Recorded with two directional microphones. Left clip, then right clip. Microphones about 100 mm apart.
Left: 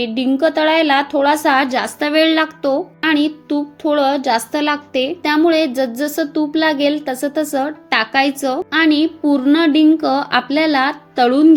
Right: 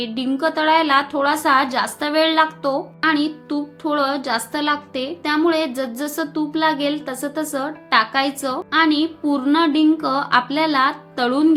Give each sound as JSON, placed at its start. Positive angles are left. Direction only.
{"t": 0.0, "sound": "speech", "side_deg": 35}